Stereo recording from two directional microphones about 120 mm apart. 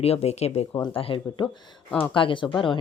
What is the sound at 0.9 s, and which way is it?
Speech, 50° left (ahead or behind).